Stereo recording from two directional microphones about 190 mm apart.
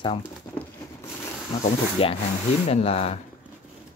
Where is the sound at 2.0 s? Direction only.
30° left (ahead or behind).